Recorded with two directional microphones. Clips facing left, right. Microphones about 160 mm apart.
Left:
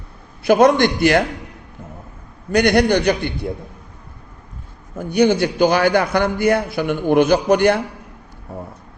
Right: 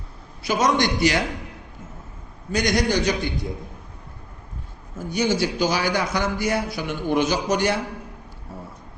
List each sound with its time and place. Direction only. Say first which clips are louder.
0.4 s a man's voice: left 8 dB; 55° left (ahead or behind)
2.5 s a man's voice: left 7 dB; 60° left (ahead or behind)
4.9 s a man's voice: left 7 dB; 60° left (ahead or behind)
8.5 s vehicle: left 7 dB; 60° left (ahead or behind)